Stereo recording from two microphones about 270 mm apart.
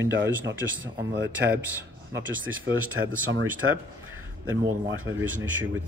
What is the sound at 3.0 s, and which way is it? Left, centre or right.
Speech, right.